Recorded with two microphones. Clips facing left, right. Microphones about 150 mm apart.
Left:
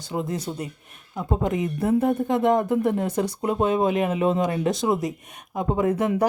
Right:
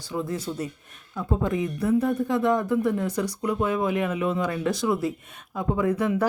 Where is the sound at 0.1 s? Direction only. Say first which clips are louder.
Left 1 dB; 25° left (ahead or behind).